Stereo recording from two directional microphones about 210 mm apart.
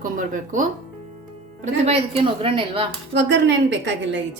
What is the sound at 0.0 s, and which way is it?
A woman's voice, 40° right (ahead or behind).